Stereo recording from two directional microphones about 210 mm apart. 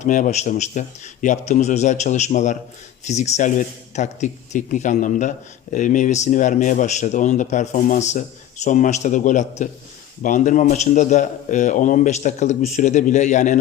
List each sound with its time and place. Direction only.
0.0 s a man's voice: 35° left (ahead or behind)